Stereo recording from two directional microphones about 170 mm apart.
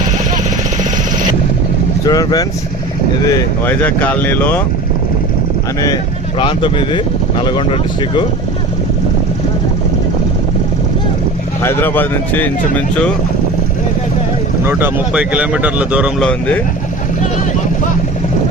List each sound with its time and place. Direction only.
2.0 s speech: 20° left (ahead or behind)
6.4 s speech: 30° left (ahead or behind)
11.6 s speech: 15° left (ahead or behind)
14.6 s speech: 10° right (ahead or behind)